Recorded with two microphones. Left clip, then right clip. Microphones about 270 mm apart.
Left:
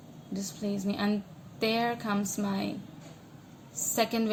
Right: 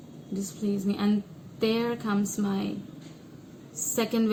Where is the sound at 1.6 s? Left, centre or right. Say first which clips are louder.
Right 1 dB; left.